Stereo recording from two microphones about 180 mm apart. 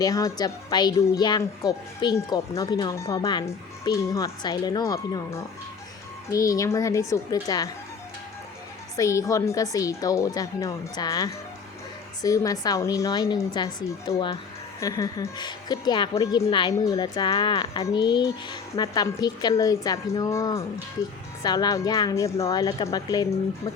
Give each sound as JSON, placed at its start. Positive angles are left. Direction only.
{"t": 0.0, "sound": "a woman's voice", "side_deg": 20}
{"t": 9.0, "sound": "a woman's voice", "side_deg": 15}